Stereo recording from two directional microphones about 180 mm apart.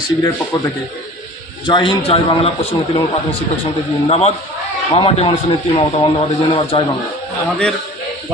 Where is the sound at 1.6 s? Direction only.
25° left (ahead or behind).